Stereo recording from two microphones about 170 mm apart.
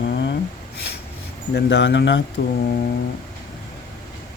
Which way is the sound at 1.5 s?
90° left.